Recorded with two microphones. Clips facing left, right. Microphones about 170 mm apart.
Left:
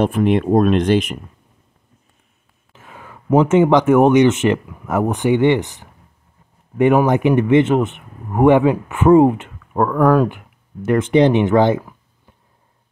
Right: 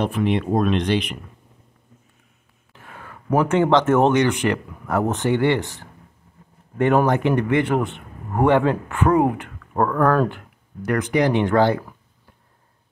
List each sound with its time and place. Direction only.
0.0 s speech: 45° left (ahead or behind)
2.7 s speech: 15° left (ahead or behind)